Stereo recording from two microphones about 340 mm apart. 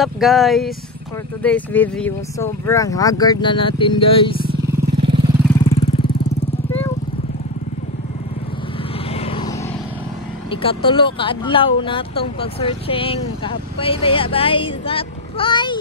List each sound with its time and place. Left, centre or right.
0.0 s speech: centre
4.6 s vehicle: centre
5.6 s vehicle: centre
9.1 s vehicle: centre
10.5 s speech: centre